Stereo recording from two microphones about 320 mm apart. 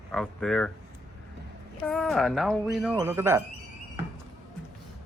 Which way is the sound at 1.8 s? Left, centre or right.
Centre.